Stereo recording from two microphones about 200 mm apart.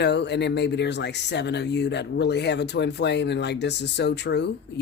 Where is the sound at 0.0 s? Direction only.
55° left (ahead or behind).